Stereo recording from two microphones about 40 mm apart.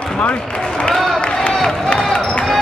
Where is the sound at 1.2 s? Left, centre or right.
Left.